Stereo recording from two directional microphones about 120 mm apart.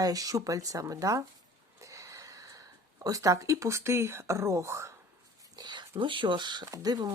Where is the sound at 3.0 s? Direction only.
30° right (ahead or behind).